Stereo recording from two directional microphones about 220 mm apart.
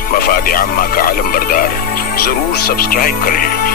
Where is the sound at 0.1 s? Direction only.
40° left (ahead or behind).